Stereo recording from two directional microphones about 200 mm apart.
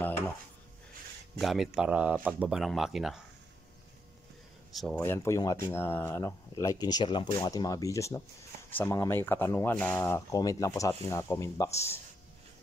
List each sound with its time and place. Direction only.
1.4 s speech: centre (ahead or behind)
4.7 s speech: 5° left (ahead or behind)